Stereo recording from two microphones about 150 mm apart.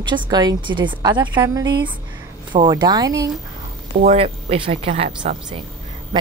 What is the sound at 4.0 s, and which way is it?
Speech, 45° right (ahead or behind).